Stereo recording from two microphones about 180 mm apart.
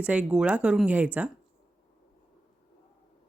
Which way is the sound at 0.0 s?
5° right (ahead or behind).